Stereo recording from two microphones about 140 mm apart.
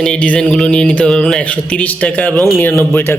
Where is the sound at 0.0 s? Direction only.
5° left (ahead or behind).